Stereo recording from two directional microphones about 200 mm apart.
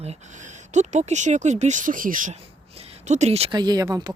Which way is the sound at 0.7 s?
35° right (ahead or behind).